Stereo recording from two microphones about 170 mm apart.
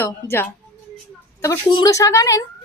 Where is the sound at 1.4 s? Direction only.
25° left (ahead or behind).